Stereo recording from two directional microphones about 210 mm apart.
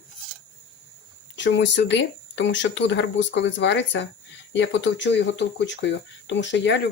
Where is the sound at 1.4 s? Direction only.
60° left (ahead or behind).